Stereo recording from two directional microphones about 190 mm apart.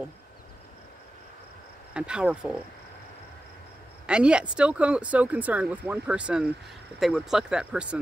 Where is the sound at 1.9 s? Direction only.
5° right (ahead or behind).